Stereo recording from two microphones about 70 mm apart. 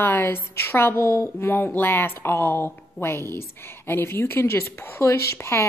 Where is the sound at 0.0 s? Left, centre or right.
Left.